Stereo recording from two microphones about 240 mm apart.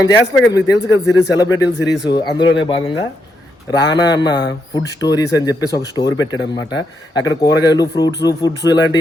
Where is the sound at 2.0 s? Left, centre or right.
Centre.